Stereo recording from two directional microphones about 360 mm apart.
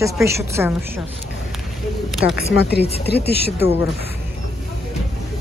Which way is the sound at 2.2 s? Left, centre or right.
Left.